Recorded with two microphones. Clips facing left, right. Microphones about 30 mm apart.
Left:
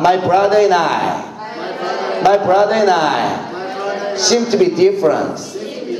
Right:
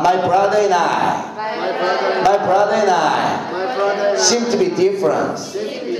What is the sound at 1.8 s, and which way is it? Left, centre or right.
Speech, centre.